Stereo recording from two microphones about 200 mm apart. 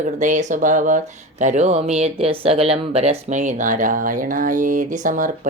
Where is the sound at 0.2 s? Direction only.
40° right (ahead or behind).